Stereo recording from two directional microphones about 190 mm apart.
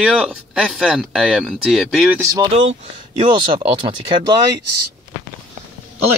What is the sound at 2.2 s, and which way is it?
Speech, 20° right (ahead or behind).